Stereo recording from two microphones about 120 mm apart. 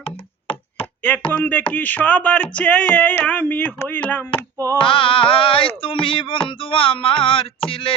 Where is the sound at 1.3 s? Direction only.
15° left (ahead or behind).